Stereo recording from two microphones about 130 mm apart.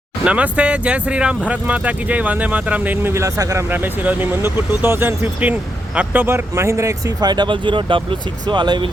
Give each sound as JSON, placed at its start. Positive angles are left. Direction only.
{"t": 0.3, "sound": "speech", "side_deg": -10}